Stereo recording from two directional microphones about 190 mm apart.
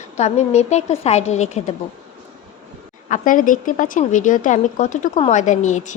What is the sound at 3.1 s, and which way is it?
Speech, 45° left (ahead or behind).